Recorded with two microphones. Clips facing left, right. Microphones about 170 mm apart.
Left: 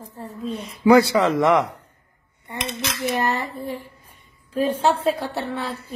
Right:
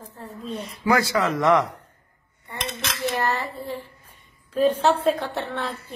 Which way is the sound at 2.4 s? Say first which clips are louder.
Left 3 dB; 15° left (ahead or behind).